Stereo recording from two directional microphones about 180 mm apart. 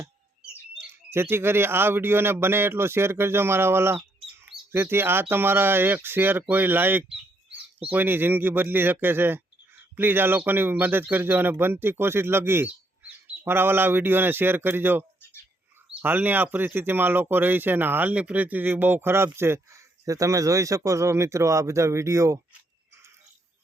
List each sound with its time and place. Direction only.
1.1 s speech: 15° right (ahead or behind)